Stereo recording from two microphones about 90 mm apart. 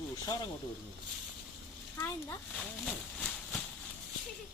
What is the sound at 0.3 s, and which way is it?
Speech, 45° left (ahead or behind).